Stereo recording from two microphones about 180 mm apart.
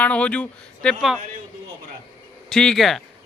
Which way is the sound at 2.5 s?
5° left (ahead or behind).